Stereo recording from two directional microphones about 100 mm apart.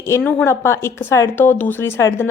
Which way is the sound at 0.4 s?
30° left (ahead or behind).